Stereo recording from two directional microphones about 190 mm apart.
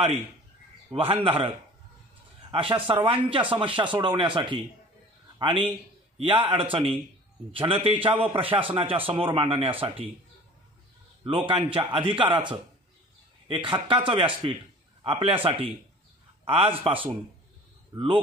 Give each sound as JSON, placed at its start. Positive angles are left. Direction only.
{"t": 0.8, "sound": "a man's voice", "side_deg": -30}
{"t": 2.9, "sound": "a man's voice", "side_deg": -25}
{"t": 11.2, "sound": "a man's voice", "side_deg": -25}